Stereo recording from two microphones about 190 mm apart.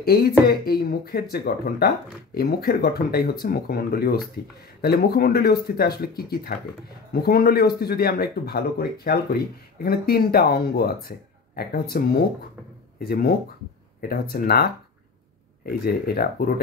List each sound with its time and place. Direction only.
0.0 s speech: 55° left (ahead or behind)